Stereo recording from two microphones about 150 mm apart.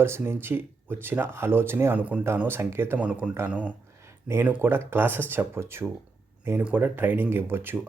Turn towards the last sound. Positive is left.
turn(degrees=-15)  # may be behind; listen again after turning